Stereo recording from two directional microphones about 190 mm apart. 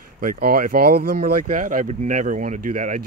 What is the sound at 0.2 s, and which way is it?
Speech, 50° right (ahead or behind).